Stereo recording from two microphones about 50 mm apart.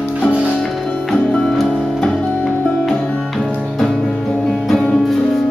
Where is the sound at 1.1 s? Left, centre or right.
Centre.